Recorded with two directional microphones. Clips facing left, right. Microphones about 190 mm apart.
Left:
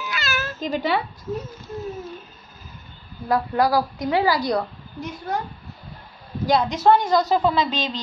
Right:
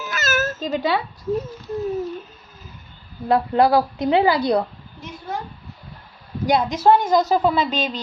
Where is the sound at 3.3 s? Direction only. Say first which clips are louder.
Right 4 dB; 25° right (ahead or behind).